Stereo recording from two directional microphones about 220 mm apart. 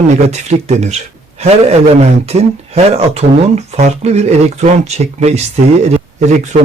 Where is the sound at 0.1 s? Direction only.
30° right (ahead or behind).